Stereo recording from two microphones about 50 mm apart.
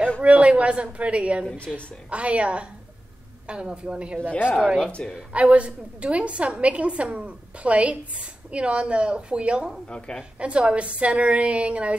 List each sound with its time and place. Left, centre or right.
0.2 s a woman's voice: right
5.3 s a woman's voice: right
9.8 s a woman's voice: centre
10.4 s a woman's voice: right